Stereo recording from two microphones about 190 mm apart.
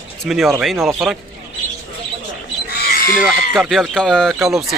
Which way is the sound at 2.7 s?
55° left (ahead or behind).